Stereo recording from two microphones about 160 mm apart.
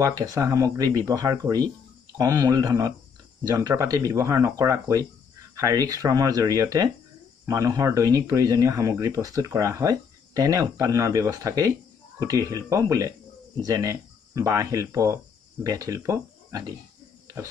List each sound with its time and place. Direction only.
0.0 s speech: 20° right (ahead or behind)